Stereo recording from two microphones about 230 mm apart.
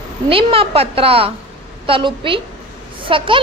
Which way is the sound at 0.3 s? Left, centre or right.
Right.